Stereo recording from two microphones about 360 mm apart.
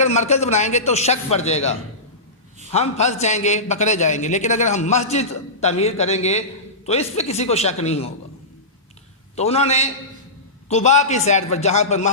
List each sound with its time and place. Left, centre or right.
0.0 s a man's voice: centre
2.7 s a man's voice: centre
9.3 s a man's voice: centre